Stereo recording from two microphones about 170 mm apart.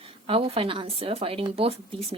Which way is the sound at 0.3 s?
35° right (ahead or behind).